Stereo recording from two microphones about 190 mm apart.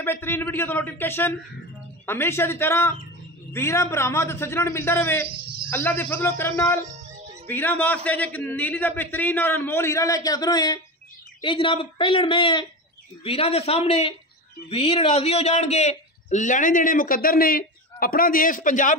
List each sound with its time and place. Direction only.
0.0 s a man's voice: 10° left (ahead or behind); by 18.9 s 45° left (ahead or behind)